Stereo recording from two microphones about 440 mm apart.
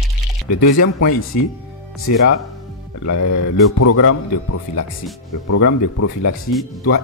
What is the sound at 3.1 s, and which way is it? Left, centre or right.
Speech, left.